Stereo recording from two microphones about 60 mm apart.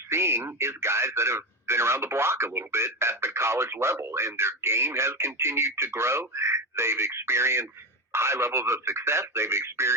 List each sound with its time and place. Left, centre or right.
0.1 s speech: right